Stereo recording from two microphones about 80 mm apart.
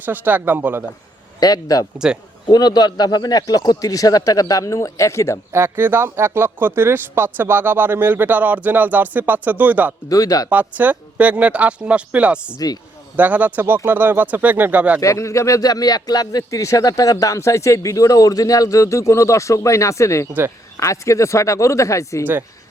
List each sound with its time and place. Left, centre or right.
0.0 s speech: right
1.4 s speech: left
5.5 s speech: right
10.1 s speech: left
10.5 s speech: right
12.5 s speech: left
13.1 s speech: right
15.0 s speech: left